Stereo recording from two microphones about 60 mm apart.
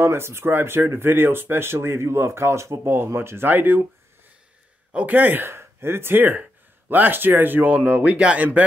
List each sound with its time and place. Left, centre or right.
0.0 s speech: right
4.9 s speech: right